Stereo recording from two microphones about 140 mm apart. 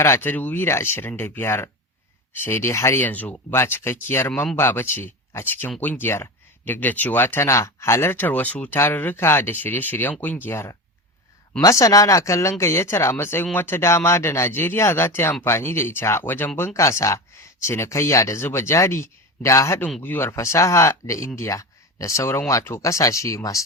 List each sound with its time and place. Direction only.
0.0 s speech: 15° left (ahead or behind)
4.3 s speech: 5° left (ahead or behind)
4.5 s speech: 15° left (ahead or behind)